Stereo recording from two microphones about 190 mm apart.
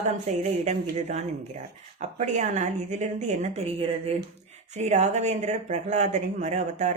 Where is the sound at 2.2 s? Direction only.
35° right (ahead or behind).